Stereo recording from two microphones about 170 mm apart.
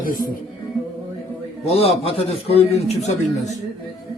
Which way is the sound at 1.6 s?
35° left (ahead or behind).